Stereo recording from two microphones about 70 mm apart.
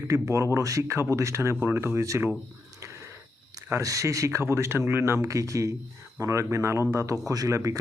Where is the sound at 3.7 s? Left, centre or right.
Right.